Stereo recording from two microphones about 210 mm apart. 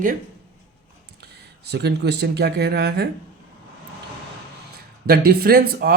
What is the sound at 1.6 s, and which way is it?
Speech, 55° right (ahead or behind).